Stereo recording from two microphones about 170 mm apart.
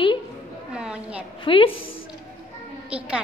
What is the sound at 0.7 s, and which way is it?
Speech, 5° right (ahead or behind).